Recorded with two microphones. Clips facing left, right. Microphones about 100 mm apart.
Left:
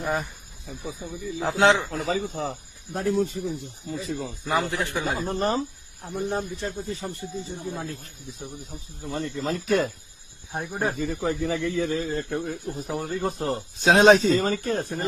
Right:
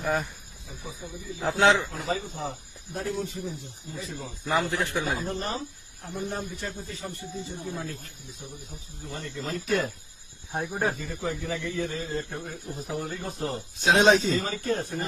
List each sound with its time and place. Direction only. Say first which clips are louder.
0.0 s speech: even; centre (ahead or behind)
1.4 s speech: left 2 dB; 20° left (ahead or behind)
1.9 s a man's voice: left 4 dB; 85° left
2.9 s speech: left 7 dB; 50° left (ahead or behind)
4.4 s speech: left 1 dB; 20° left (ahead or behind)
4.9 s speech: left 3 dB; 35° left (ahead or behind)
10.5 s speech: even; centre (ahead or behind)
10.9 s speech: left 6 dB; 60° left (ahead or behind)
13.0 s speech: left 6 dB; 50° left (ahead or behind)